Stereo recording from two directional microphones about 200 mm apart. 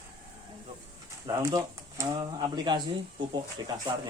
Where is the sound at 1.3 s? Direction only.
15° right (ahead or behind).